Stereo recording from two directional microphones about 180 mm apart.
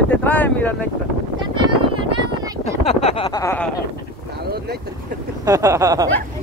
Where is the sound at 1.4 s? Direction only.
30° right (ahead or behind).